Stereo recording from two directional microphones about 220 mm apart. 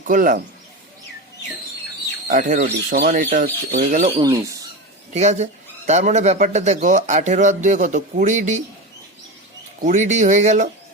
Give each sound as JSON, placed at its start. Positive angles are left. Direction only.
{"t": 0.0, "sound": "speech", "side_deg": -35}
{"t": 2.2, "sound": "speech", "side_deg": -35}
{"t": 4.2, "sound": "speech", "side_deg": -15}
{"t": 5.1, "sound": "speech", "side_deg": -30}
{"t": 9.8, "sound": "speech", "side_deg": -35}